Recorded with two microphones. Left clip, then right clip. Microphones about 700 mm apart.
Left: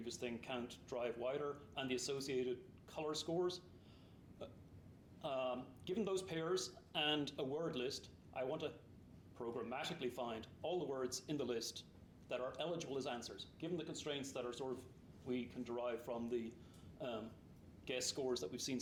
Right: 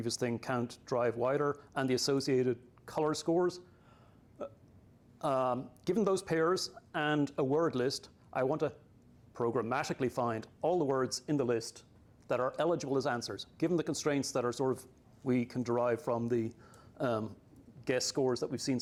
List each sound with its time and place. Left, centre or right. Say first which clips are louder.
0.0 s speech: right 11 dB; right
5.2 s speech: right 11 dB; right
9.4 s speech: right 12 dB; right
17.8 s speech: right 10 dB; right